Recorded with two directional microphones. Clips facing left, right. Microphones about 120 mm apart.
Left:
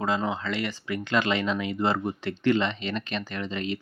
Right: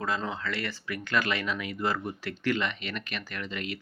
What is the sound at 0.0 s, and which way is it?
Speech, 20° left (ahead or behind).